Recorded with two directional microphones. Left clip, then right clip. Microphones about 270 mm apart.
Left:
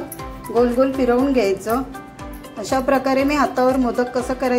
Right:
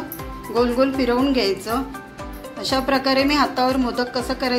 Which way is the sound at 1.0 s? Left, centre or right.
Centre.